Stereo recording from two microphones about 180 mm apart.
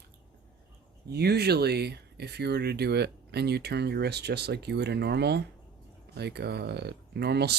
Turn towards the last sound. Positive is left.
turn(degrees=-65)  # may be behind; listen again after turning